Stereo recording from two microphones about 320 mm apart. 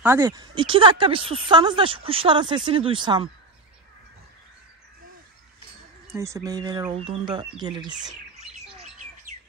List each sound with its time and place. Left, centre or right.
0.0 s speech: centre
6.1 s speech: centre